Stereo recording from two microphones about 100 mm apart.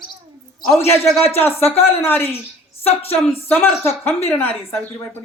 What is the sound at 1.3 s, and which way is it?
Speech, 20° left (ahead or behind).